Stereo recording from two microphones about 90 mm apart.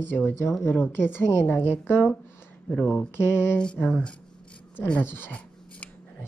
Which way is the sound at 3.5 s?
15° left (ahead or behind).